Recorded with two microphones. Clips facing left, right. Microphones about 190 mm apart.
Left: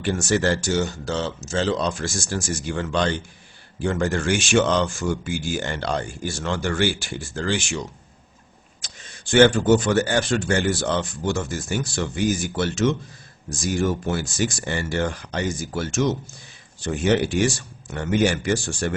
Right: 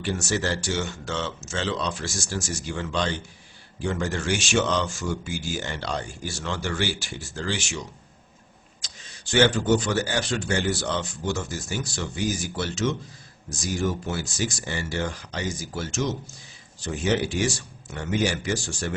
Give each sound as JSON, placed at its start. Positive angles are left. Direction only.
{"t": 0.0, "sound": "speech", "side_deg": 55}
{"t": 8.8, "sound": "speech", "side_deg": 50}